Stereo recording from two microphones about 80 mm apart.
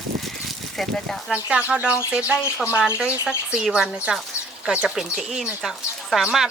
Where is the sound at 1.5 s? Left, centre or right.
Centre.